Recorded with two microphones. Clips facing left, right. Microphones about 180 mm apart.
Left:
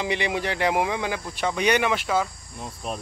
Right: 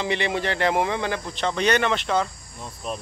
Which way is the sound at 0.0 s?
10° left (ahead or behind).